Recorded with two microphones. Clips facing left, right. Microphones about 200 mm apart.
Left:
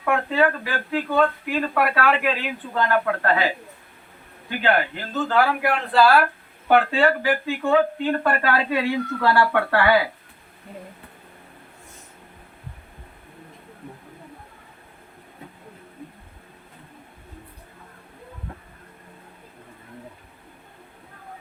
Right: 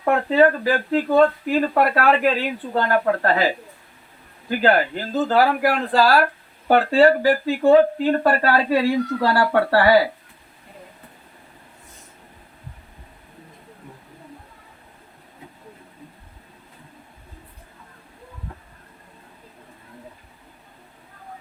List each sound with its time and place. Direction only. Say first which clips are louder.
0.0 s speech: right 5 dB; 35° right (ahead or behind)
4.4 s speech: right 4 dB; 35° right (ahead or behind)